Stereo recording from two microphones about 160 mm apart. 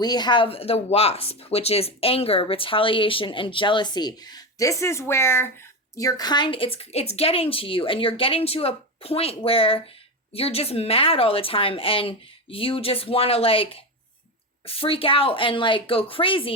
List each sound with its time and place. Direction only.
0.0 s speech: 25° left (ahead or behind)